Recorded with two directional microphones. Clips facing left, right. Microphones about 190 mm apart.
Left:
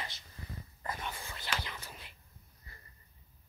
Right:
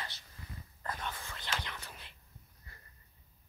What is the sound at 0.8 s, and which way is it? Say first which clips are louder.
Whispering: even; 10° left (ahead or behind).